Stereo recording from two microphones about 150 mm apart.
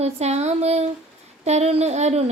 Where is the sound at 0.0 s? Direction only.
45° right (ahead or behind).